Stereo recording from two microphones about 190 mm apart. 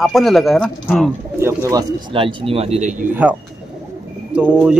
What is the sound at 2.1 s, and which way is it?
Speech, 30° right (ahead or behind).